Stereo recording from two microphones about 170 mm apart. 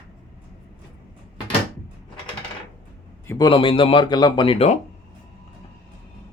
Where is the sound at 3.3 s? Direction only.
25° left (ahead or behind).